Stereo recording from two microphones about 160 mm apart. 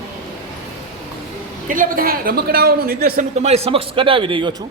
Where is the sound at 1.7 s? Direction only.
60° right (ahead or behind).